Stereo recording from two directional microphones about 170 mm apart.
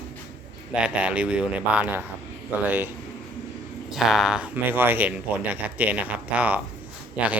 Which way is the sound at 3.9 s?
Centre (ahead or behind).